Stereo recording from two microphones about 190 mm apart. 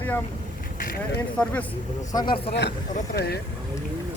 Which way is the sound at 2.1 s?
25° left (ahead or behind).